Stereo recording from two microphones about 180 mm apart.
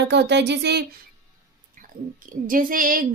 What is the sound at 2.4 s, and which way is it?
Speech, 50° right (ahead or behind).